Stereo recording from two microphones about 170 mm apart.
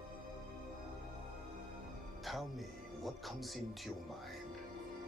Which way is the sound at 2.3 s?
Centre (ahead or behind).